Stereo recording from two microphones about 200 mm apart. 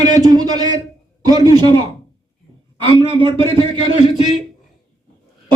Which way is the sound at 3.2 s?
25° right (ahead or behind).